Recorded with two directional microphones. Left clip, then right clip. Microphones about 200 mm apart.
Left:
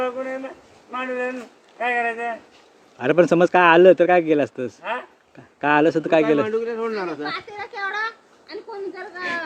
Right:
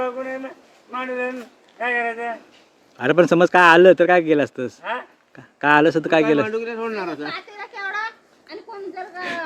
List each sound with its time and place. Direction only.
0.0 s speech: 10° right (ahead or behind)
3.0 s speech: 20° right (ahead or behind)
4.8 s speech: 5° right (ahead or behind)
5.5 s speech: 20° right (ahead or behind)
6.5 s a man's voice: 55° right (ahead or behind)
7.3 s a sound: 15° left (ahead or behind)